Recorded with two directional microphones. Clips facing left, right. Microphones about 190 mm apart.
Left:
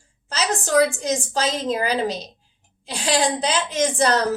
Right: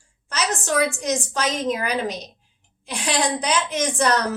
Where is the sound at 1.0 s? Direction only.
30° left (ahead or behind).